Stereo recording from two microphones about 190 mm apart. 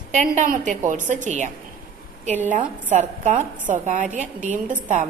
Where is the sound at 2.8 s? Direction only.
40° right (ahead or behind).